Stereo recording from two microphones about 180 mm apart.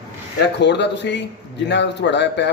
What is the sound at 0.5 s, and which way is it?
A man's voice, 70° left (ahead or behind).